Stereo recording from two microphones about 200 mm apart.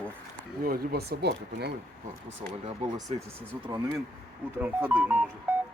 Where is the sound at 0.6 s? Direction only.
50° right (ahead or behind).